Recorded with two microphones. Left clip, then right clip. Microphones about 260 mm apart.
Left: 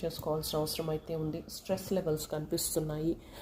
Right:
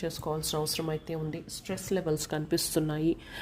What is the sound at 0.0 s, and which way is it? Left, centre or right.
Speech, right.